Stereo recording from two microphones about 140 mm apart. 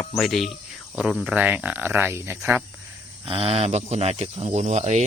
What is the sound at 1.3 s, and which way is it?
Speech, 10° right (ahead or behind).